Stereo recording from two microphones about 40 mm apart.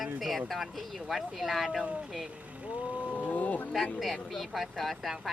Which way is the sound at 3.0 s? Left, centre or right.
Left.